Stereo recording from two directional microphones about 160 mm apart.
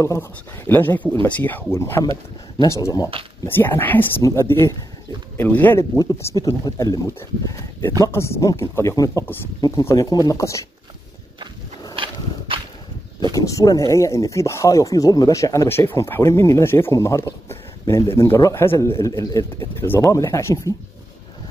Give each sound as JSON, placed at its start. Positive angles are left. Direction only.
{"t": 0.0, "sound": "speech", "side_deg": 15}
{"t": 11.9, "sound": "walk", "side_deg": -35}
{"t": 13.3, "sound": "speech", "side_deg": 20}